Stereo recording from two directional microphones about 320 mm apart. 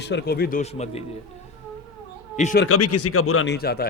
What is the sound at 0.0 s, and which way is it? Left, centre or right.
A man's voice, left.